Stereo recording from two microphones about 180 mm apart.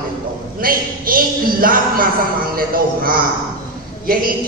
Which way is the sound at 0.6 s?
55° right (ahead or behind).